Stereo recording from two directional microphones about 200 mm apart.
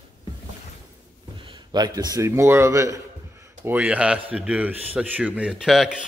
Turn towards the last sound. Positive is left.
turn(degrees=0)  # may be behind; listen again after turning